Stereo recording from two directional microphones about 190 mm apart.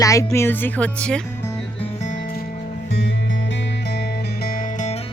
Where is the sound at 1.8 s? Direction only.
40° left (ahead or behind).